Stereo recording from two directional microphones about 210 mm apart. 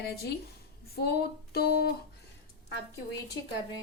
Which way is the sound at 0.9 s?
50° left (ahead or behind).